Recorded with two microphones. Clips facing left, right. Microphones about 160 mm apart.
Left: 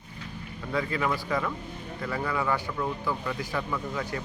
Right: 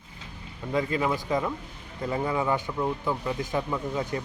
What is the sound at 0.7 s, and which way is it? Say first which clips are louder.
Speech: right 2 dB; 20° right (ahead or behind).